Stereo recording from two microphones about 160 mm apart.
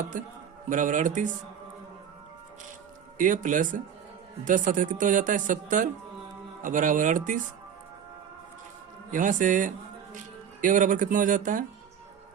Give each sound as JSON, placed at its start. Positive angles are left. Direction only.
{"t": 0.7, "sound": "speech", "side_deg": -55}
{"t": 3.2, "sound": "speech", "side_deg": -55}
{"t": 9.1, "sound": "speech", "side_deg": -55}